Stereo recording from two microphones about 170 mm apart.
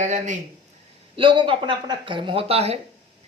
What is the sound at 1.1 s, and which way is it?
Speech, 30° right (ahead or behind).